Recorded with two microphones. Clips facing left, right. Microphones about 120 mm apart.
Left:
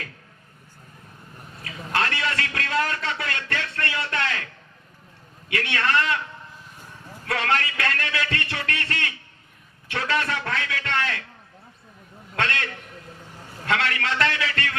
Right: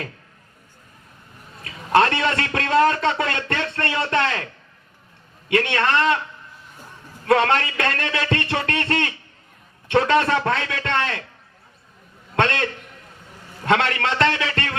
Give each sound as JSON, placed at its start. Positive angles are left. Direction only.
{"t": 1.6, "sound": "a sound", "side_deg": -30}
{"t": 5.5, "sound": "a man's voice", "side_deg": -25}
{"t": 7.3, "sound": "a man's voice", "side_deg": -30}
{"t": 12.4, "sound": "a man's voice", "side_deg": -25}